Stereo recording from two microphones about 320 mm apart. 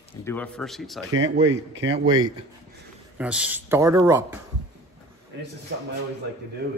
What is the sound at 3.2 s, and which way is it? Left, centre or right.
Speech, centre.